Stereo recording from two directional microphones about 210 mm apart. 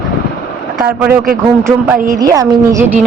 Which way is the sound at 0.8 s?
5° right (ahead or behind).